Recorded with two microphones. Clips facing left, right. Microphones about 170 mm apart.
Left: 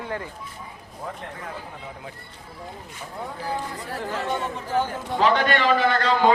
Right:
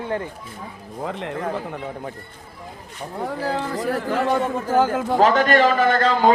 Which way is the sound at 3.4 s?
90° right.